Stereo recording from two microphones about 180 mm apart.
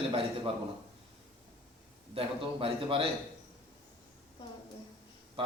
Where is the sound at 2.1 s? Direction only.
30° right (ahead or behind).